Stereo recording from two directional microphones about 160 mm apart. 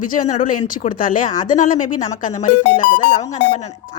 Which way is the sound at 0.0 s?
55° left (ahead or behind).